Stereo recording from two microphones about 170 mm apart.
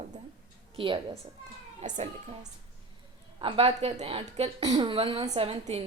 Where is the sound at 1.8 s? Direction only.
45° right (ahead or behind).